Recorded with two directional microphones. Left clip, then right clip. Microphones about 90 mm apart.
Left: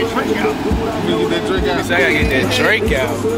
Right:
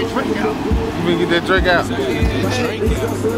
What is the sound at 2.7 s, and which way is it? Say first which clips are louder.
Speech: left 5 dB; 30° left (ahead or behind).